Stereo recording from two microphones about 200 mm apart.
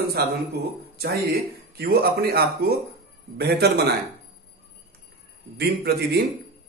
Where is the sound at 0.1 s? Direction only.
50° right (ahead or behind).